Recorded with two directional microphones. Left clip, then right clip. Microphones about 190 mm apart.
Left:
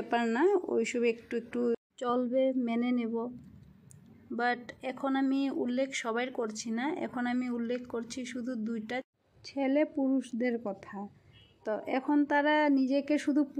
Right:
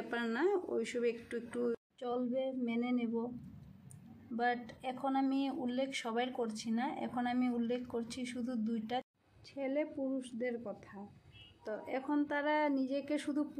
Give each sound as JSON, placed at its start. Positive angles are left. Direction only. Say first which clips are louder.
{"t": 0.1, "sound": "a woman's voice", "louder": "left 7 dB", "side_deg": 25}
{"t": 2.0, "sound": "a woman's voice", "louder": "left 10 dB", "side_deg": 40}
{"t": 4.4, "sound": "a woman's voice", "louder": "left 4 dB", "side_deg": 35}